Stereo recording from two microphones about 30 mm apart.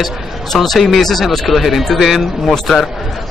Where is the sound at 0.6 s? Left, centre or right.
Centre.